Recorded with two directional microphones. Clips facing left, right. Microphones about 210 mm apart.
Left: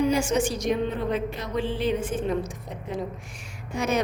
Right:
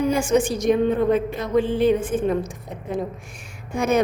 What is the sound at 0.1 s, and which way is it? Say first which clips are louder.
A woman's voice: right 4 dB; 55° right (ahead or behind).